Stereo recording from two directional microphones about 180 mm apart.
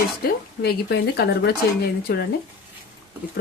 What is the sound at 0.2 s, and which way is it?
Speech, 60° left (ahead or behind).